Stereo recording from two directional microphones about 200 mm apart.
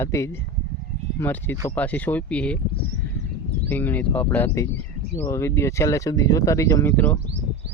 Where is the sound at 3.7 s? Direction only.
10° left (ahead or behind).